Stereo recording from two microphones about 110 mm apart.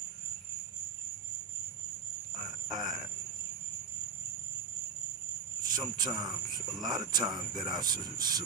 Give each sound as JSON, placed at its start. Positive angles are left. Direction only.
{"t": 2.7, "sound": "speech", "side_deg": -40}
{"t": 5.7, "sound": "speech", "side_deg": -40}